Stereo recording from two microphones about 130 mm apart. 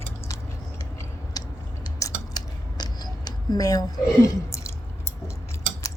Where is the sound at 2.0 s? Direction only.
30° left (ahead or behind).